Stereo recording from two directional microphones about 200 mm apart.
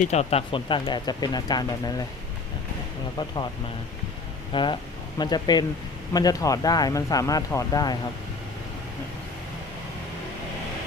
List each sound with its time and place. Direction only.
0.0 s speech: 35° left (ahead or behind)
4.5 s speech: 25° left (ahead or behind)